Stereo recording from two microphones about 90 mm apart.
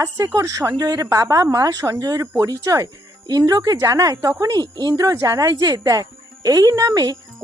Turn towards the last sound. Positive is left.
turn(degrees=-45)  # may be behind; listen again after turning